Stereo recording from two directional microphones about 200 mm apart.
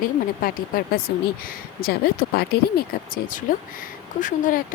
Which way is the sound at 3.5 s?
40° left (ahead or behind).